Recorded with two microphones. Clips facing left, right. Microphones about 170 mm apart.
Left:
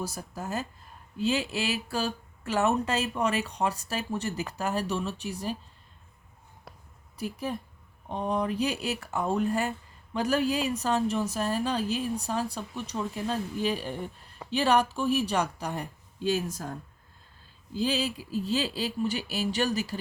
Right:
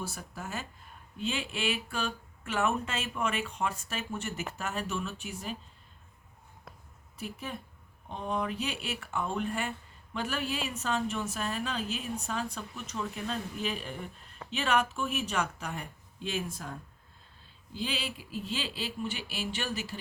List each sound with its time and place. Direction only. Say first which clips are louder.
0.0 s a woman's voice: left 4 dB; 40° left (ahead or behind)
7.2 s a woman's voice: left 6 dB; 35° left (ahead or behind)
17.7 s a woman's voice: left 8 dB; 40° left (ahead or behind)